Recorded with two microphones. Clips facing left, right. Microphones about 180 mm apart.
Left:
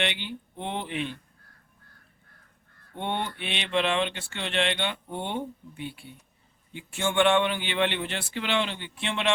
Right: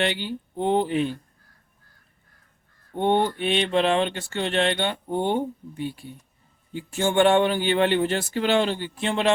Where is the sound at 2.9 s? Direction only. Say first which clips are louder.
Right 10 dB; 45° right (ahead or behind).